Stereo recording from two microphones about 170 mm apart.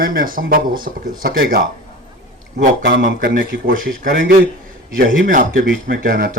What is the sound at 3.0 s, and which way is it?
A man's voice, 50° right (ahead or behind).